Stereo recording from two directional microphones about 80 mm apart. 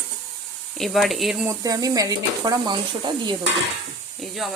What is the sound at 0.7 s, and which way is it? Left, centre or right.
Speech, centre.